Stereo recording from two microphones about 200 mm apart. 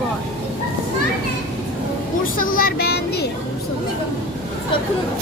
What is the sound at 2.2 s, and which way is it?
Speech, 45° left (ahead or behind).